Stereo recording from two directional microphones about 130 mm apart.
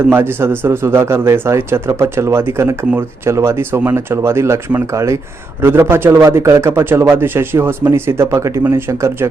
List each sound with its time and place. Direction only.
0.1 s speech: 15° right (ahead or behind)